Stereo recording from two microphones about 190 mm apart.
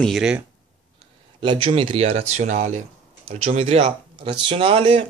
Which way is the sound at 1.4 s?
25° right (ahead or behind).